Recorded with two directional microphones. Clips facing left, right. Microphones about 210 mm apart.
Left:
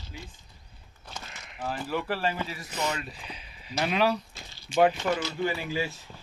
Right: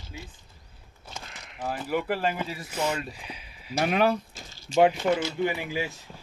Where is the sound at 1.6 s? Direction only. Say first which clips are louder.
Right 2 dB; 10° right (ahead or behind).